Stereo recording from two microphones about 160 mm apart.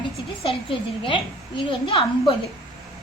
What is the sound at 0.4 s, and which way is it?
A woman's voice, 30° left (ahead or behind).